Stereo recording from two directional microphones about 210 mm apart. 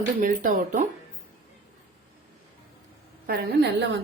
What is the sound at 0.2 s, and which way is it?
Speech, 40° right (ahead or behind).